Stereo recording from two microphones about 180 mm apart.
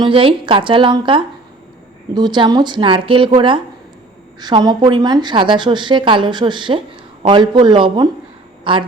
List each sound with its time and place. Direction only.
0.0 s a woman's voice: 30° right (ahead or behind)